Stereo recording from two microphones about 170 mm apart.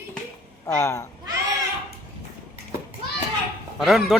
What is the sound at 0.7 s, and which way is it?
Speech, 15° left (ahead or behind).